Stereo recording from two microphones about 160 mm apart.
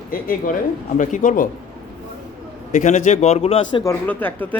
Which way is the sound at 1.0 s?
55° left (ahead or behind).